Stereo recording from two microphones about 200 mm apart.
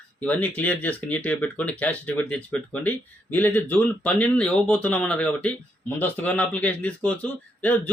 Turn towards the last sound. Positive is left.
turn(degrees=5)  # may be behind; listen again after turning